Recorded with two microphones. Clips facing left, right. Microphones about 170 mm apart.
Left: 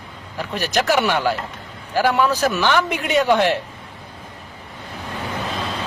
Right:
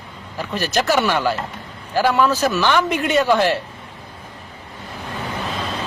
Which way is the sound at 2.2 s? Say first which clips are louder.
Right 1 dB; 15° left (ahead or behind).